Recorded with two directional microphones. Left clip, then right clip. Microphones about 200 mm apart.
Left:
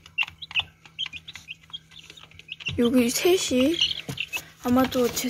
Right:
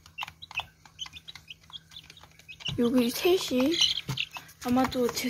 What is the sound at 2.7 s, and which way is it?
Speech, 5° left (ahead or behind).